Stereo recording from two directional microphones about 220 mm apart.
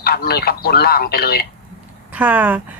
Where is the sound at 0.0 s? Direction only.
45° left (ahead or behind).